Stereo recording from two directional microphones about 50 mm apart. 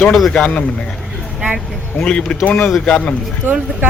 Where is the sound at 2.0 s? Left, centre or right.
Centre.